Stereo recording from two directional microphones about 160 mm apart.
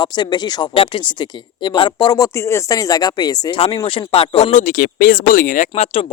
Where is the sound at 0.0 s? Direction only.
25° left (ahead or behind).